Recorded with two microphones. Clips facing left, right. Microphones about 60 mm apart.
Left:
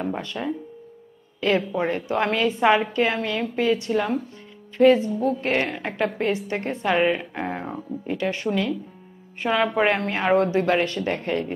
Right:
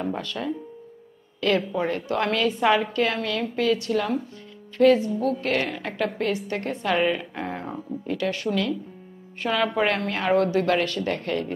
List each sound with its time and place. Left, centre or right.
0.0 s a woman's voice: left